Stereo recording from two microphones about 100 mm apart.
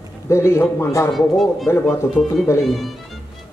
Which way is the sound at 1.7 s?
25° left (ahead or behind).